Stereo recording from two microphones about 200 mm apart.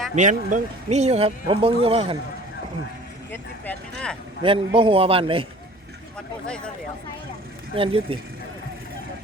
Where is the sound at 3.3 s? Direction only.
5° left (ahead or behind).